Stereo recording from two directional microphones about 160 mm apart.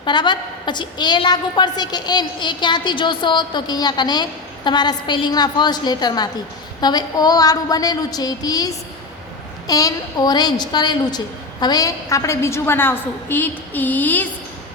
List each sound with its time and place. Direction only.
0.0 s a woman's voice: 30° left (ahead or behind); by 14.3 s 10° left (ahead or behind)